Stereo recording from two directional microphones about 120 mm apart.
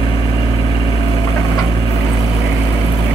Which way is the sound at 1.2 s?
25° left (ahead or behind).